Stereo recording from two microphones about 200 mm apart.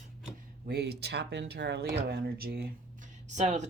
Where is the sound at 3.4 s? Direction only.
35° right (ahead or behind).